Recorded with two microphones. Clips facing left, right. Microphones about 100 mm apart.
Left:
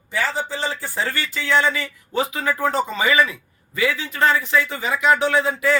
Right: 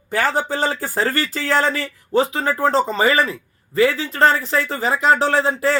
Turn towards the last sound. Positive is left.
turn(degrees=-35)  # may be behind; listen again after turning